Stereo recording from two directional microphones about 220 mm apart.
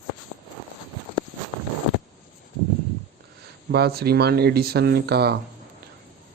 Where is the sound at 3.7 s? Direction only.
45° right (ahead or behind).